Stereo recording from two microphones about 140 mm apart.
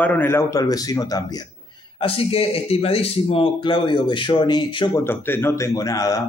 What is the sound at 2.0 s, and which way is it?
A man's voice, 40° left (ahead or behind).